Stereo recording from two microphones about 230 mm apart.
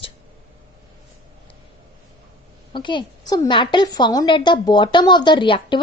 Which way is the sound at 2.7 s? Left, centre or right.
Centre.